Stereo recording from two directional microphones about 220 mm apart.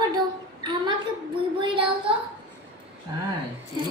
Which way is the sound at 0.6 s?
20° right (ahead or behind).